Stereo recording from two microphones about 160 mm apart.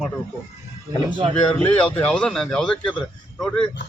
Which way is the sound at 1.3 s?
10° left (ahead or behind).